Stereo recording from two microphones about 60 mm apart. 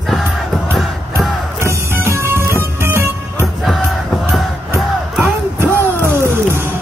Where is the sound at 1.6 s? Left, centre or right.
Right.